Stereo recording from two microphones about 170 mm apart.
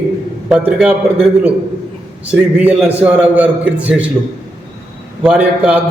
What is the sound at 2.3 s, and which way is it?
A man's voice, 10° right (ahead or behind).